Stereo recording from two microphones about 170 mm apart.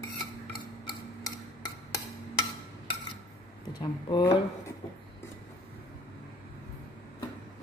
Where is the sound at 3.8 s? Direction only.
25° left (ahead or behind).